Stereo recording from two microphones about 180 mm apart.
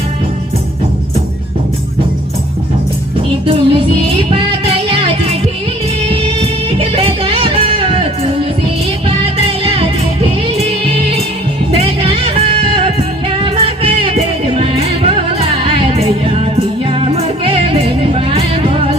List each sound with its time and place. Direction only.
3.4 s music: 30° right (ahead or behind)
11.7 s music: 30° right (ahead or behind)